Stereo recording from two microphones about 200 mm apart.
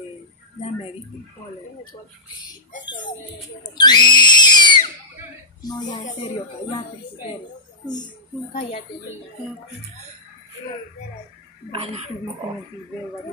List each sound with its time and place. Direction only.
3.6 s speech: 20° left (ahead or behind)
11.7 s speech: 25° right (ahead or behind)